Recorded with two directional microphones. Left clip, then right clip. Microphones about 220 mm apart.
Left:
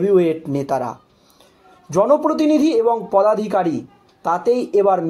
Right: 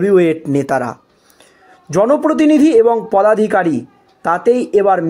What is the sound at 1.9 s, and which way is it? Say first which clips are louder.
Speech: right 3 dB; 40° right (ahead or behind).